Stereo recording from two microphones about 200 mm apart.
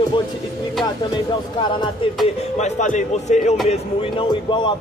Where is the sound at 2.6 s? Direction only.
35° left (ahead or behind).